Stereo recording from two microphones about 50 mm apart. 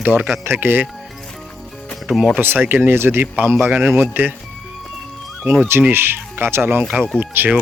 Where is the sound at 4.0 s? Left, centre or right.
Right.